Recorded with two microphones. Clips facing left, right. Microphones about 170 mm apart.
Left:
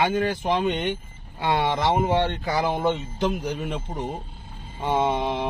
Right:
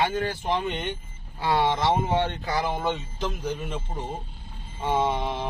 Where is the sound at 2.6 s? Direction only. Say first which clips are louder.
Left 4 dB; 20° left (ahead or behind).